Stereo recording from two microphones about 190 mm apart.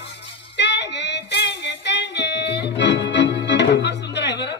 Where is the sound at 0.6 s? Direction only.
65° left (ahead or behind).